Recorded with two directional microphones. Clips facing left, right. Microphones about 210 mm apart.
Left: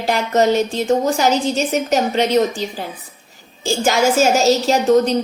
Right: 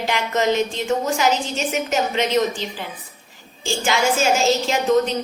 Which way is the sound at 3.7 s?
40° left (ahead or behind).